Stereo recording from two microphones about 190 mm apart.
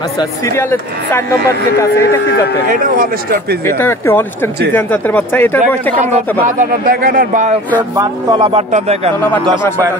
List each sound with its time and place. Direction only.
0.6 s speech: 10° left (ahead or behind)
2.2 s a man's voice: 60° left (ahead or behind)
2.7 s speech: 45° right (ahead or behind)
3.6 s speech: 10° left (ahead or behind)
6.4 s speech: 45° right (ahead or behind)
7.9 s speech: 20° right (ahead or behind); by 9.1 s 35° right (ahead or behind)